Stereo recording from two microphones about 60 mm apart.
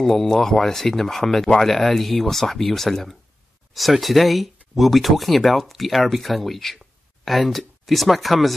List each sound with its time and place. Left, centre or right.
0.0 s speech: centre